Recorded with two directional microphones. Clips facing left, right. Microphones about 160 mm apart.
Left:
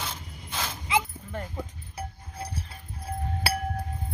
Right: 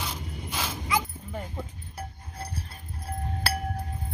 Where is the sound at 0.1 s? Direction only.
10° right (ahead or behind).